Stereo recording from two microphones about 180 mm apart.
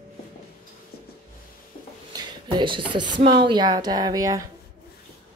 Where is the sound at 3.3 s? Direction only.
25° right (ahead or behind).